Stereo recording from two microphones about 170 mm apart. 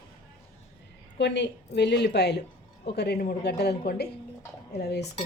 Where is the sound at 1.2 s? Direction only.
90° left; by 5.1 s 70° left (ahead or behind).